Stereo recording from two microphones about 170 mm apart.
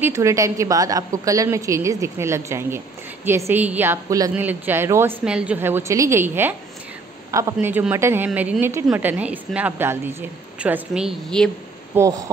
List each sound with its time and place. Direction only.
0.0 s a woman's voice: 15° right (ahead or behind)
7.5 s a woman's voice: 5° right (ahead or behind)
11.9 s speech: 20° right (ahead or behind)